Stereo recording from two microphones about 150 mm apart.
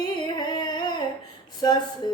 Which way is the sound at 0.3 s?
30° left (ahead or behind).